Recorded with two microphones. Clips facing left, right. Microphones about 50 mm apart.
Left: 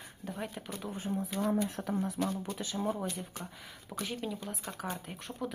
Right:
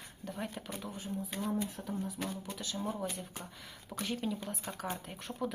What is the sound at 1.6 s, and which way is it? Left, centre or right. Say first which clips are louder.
Speech: left 5 dB; left.